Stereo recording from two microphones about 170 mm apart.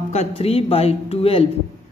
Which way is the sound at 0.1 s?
35° left (ahead or behind).